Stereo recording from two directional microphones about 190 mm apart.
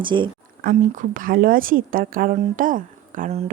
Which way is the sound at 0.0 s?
25° right (ahead or behind).